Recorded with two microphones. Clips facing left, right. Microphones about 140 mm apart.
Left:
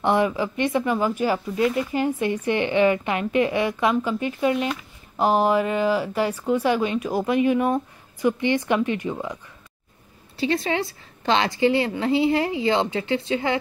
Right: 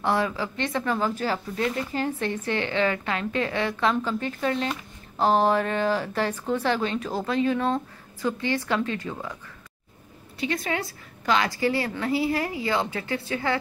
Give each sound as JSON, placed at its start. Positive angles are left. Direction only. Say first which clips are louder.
{"t": 0.0, "sound": "speech", "louder": "left 4 dB", "side_deg": 20}
{"t": 10.4, "sound": "a woman's voice", "louder": "left 5 dB", "side_deg": 25}